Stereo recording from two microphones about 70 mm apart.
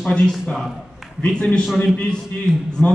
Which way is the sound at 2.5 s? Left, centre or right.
Centre.